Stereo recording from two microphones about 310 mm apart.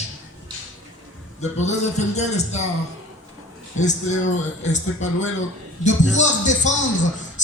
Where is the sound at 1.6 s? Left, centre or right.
Left.